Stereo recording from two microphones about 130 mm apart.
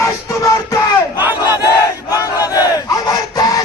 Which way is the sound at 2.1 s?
30° left (ahead or behind).